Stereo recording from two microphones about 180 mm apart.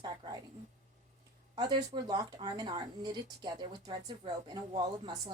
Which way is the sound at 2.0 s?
25° right (ahead or behind).